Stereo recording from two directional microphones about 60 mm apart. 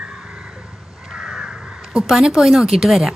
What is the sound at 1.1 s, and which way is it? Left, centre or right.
Crow, centre.